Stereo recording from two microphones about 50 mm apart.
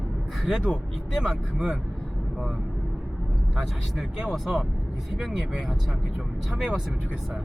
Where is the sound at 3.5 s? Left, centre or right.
Centre.